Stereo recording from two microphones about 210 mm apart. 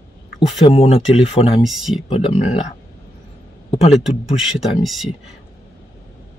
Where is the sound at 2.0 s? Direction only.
30° left (ahead or behind).